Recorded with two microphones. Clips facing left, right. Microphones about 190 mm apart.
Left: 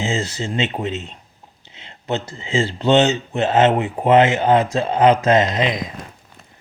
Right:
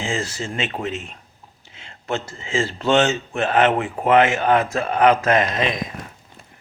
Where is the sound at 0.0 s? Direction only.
20° left (ahead or behind).